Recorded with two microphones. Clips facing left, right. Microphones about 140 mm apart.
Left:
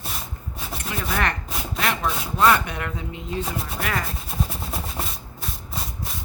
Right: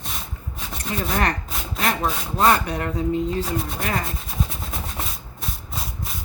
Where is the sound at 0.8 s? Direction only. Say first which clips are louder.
Right 2 dB; 35° right (ahead or behind).